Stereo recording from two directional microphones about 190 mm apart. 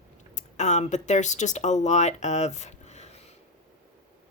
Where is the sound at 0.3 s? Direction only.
40° left (ahead or behind).